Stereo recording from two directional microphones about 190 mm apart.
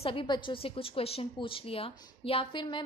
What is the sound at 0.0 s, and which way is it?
A woman's voice, 30° left (ahead or behind).